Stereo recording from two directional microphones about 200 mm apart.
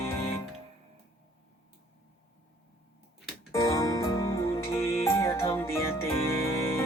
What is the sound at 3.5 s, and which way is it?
Music, 15° left (ahead or behind).